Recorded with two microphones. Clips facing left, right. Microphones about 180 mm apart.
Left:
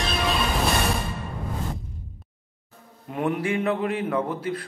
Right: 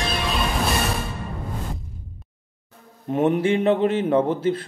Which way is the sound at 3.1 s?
25° right (ahead or behind).